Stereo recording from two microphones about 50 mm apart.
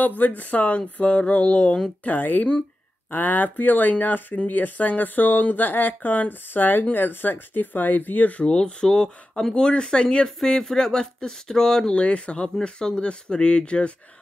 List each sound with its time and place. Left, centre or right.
0.0 s speech: left
2.0 s speech: left
8.5 s speech: centre